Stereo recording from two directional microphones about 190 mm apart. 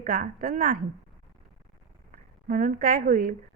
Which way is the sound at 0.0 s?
45° right (ahead or behind).